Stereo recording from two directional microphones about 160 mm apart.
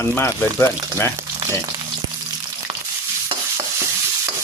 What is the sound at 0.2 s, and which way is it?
Speech, 15° left (ahead or behind).